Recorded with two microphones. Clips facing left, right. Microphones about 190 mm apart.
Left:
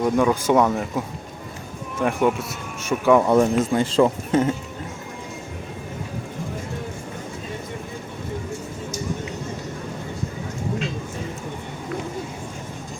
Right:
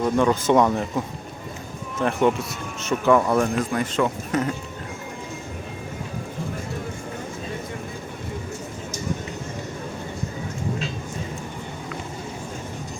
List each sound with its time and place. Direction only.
0.0 s speech: 10° left (ahead or behind)
3.2 s a man's voice: 20° left (ahead or behind)